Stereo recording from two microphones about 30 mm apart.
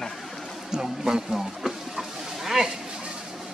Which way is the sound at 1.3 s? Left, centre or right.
Centre.